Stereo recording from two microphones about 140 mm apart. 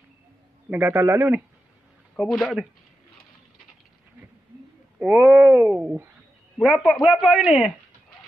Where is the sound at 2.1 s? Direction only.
Centre (ahead or behind).